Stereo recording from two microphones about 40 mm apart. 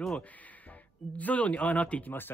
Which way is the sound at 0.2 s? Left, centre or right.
Left.